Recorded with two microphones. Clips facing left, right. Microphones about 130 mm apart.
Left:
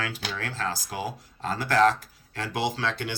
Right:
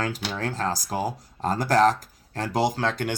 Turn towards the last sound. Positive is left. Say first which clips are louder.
# right 4 dB
turn(degrees=-45)  # may be behind; listen again after turning